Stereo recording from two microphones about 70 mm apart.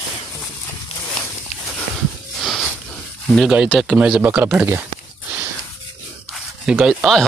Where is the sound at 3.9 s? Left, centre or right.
Centre.